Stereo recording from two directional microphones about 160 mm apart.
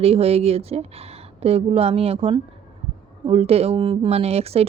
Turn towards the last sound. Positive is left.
turn(degrees=-40)  # may be behind; listen again after turning